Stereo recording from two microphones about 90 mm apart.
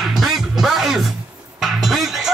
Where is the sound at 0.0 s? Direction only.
5° right (ahead or behind).